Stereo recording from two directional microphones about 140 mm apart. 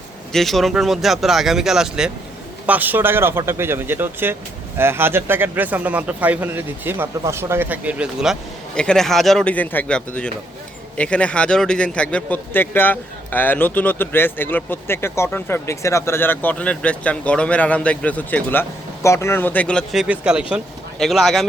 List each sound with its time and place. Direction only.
0.3 s speech: centre (ahead or behind)
8.7 s a man's voice: 5° left (ahead or behind)
19.9 s speech: 5° right (ahead or behind)